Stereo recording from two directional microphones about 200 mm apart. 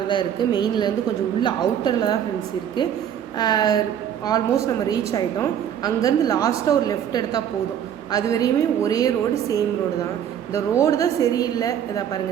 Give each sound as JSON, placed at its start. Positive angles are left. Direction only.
{"t": 0.1, "sound": "speech", "side_deg": 20}
{"t": 3.3, "sound": "a woman's voice", "side_deg": 20}